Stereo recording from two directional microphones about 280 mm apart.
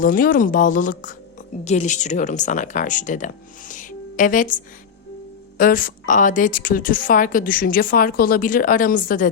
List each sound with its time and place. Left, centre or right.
0.0 s a woman's voice: left